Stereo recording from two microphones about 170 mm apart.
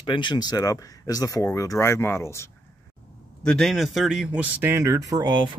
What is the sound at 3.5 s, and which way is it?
Speech, centre (ahead or behind).